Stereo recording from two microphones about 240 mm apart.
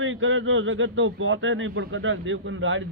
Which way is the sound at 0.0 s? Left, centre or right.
Right.